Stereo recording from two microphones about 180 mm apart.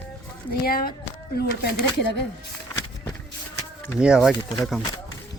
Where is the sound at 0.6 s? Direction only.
55° left (ahead or behind).